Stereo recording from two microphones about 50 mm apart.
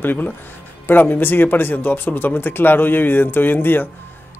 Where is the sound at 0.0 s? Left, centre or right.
Left.